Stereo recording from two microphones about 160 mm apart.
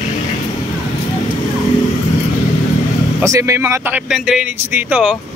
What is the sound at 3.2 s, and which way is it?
A man's voice, 20° right (ahead or behind).